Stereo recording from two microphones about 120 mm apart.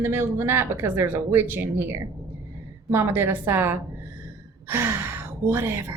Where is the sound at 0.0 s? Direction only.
20° right (ahead or behind).